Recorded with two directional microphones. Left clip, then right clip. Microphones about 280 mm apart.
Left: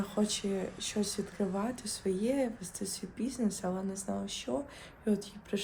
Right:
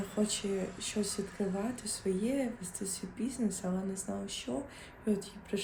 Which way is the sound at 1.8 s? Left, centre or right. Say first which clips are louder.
Left 1 dB; centre.